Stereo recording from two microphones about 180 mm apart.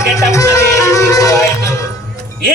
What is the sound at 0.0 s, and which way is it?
Music, 15° left (ahead or behind).